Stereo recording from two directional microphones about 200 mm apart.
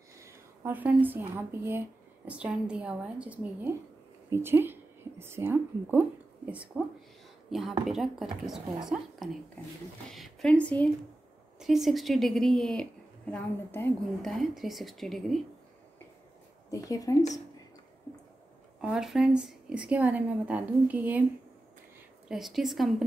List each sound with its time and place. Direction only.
0.2 s a woman's voice: 10° right (ahead or behind)
16.7 s a woman's voice: 15° left (ahead or behind)
18.8 s a woman's voice: 5° right (ahead or behind)
22.3 s a woman's voice: centre (ahead or behind)